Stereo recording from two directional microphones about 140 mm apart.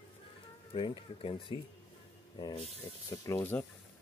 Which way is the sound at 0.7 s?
40° left (ahead or behind).